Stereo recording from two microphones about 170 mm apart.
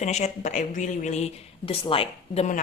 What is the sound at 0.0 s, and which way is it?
Speech, 40° left (ahead or behind).